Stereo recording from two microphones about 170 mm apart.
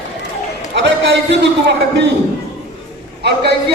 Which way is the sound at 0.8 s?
90° right.